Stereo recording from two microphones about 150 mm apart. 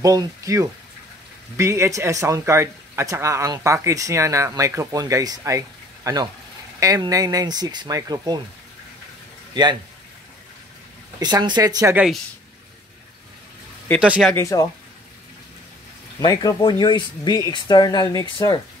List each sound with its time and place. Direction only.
0.0 s speech: 20° right (ahead or behind)
9.5 s speech: 30° right (ahead or behind)
11.1 s speech: 25° right (ahead or behind)
14.3 s speech: 20° left (ahead or behind)
16.2 s speech: 25° left (ahead or behind)